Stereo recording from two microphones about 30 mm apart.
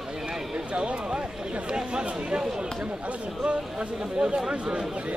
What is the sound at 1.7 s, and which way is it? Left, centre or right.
Speech, right.